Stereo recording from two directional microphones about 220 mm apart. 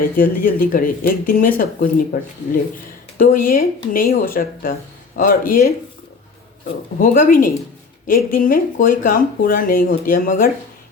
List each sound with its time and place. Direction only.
0.2 s speech: 40° left (ahead or behind)
7.0 s speech: 40° left (ahead or behind)